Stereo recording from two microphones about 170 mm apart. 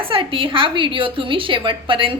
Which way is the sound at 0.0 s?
30° right (ahead or behind).